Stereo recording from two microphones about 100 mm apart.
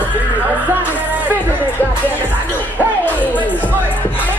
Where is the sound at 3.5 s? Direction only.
20° left (ahead or behind).